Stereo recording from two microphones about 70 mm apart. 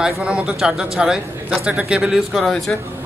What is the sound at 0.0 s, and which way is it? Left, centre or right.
A man's voice, centre.